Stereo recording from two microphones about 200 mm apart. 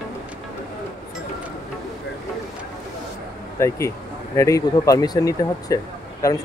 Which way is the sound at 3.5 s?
15° left (ahead or behind).